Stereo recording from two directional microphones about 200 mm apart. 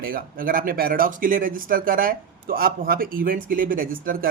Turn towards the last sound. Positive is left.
turn(degrees=-45)  # may be behind; listen again after turning